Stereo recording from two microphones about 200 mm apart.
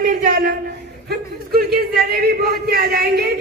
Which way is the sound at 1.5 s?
50° right (ahead or behind).